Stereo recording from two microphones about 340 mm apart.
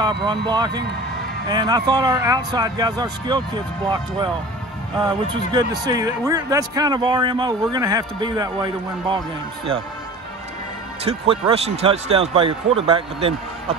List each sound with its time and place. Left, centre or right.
0.0 s a man's voice: centre
5.3 s a man's voice: centre
11.1 s a man's voice: centre